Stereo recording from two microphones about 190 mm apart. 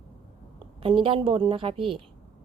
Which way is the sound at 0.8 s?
25° right (ahead or behind).